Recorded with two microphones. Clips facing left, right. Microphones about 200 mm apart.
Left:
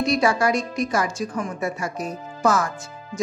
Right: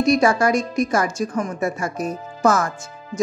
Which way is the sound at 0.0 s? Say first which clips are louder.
Right 3 dB; 45° right (ahead or behind).